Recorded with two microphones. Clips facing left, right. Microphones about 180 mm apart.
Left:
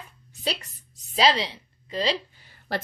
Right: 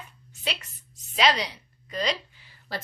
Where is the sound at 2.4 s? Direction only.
50° left (ahead or behind).